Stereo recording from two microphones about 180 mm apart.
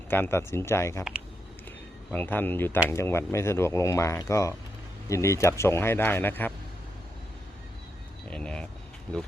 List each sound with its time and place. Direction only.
0.1 s speech: 15° left (ahead or behind)
2.0 s speech: 10° left (ahead or behind)
8.3 s vehicle: 5° left (ahead or behind)